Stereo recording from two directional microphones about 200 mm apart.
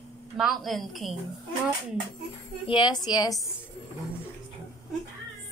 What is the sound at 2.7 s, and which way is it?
Speech, 20° left (ahead or behind).